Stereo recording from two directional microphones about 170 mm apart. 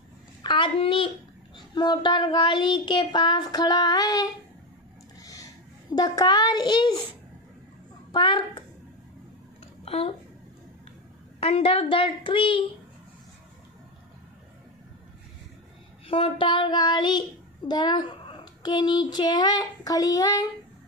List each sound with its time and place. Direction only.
0.4 s a child's voice: 30° left (ahead or behind)
5.2 s a sound: 20° left (ahead or behind)
8.1 s a woman's voice: 30° left (ahead or behind)
9.8 s speech: 35° left (ahead or behind)
11.3 s a woman's voice: 35° left (ahead or behind)
16.1 s a child's voice: 30° left (ahead or behind)